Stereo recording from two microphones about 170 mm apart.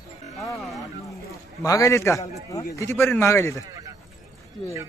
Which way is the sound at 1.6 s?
20° left (ahead or behind).